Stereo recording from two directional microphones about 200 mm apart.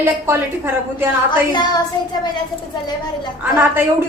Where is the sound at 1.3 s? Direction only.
20° left (ahead or behind).